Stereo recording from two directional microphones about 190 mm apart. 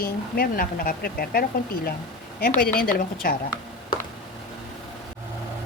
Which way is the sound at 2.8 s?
50° left (ahead or behind).